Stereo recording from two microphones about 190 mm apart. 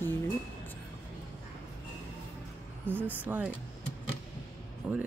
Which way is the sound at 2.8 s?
10° right (ahead or behind).